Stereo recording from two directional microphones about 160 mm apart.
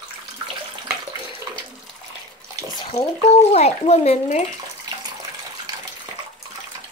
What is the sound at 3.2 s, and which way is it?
Speech, 40° left (ahead or behind).